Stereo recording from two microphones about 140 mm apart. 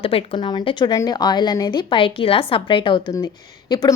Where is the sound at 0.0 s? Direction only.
40° left (ahead or behind).